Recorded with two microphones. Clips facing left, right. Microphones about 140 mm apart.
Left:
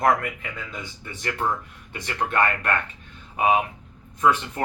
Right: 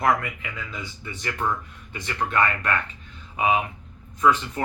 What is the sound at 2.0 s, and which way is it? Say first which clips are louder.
Speech: left 1 dB; 55° left (ahead or behind).